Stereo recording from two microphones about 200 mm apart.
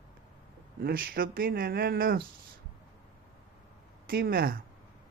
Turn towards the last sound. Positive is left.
turn(degrees=-45)  # may be behind; listen again after turning